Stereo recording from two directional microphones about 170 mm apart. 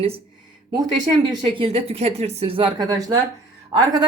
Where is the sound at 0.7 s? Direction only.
25° right (ahead or behind).